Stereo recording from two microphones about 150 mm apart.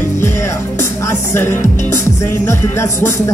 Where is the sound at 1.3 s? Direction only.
15° left (ahead or behind).